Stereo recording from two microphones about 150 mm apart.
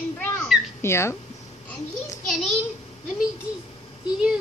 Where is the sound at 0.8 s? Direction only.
15° left (ahead or behind).